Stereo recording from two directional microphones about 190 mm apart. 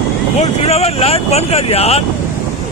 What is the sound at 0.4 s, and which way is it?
Speech, 35° left (ahead or behind).